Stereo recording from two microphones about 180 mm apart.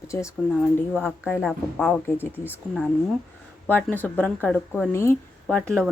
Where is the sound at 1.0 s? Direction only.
10° left (ahead or behind).